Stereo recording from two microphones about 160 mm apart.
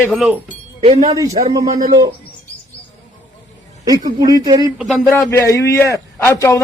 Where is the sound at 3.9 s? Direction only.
25° right (ahead or behind).